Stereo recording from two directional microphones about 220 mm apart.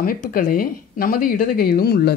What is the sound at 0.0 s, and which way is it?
Speech, 40° left (ahead or behind).